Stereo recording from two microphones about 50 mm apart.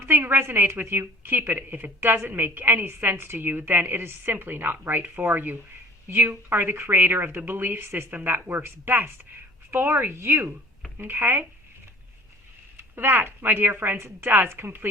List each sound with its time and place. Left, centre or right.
0.1 s a woman's voice: right
6.1 s a woman's voice: right
10.9 s a woman's voice: right
12.7 s a woman's voice: right